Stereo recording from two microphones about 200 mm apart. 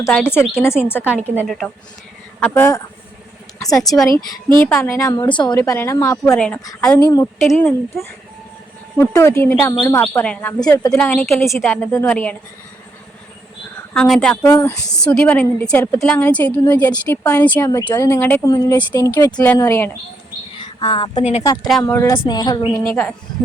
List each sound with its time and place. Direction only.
0.0 s a woman's voice: 10° left (ahead or behind)
1.4 s speech: centre (ahead or behind)
2.4 s a woman's voice: 10° left (ahead or behind)
3.8 s speech: centre (ahead or behind)
4.6 s a woman's voice: 10° left (ahead or behind)
7.4 s speech: 5° left (ahead or behind)
9.0 s a woman's voice: 15° left (ahead or behind)
13.9 s a woman's voice: 5° left (ahead or behind)
20.6 s speech: 25° left (ahead or behind)
21.4 s a woman's voice: 20° left (ahead or behind)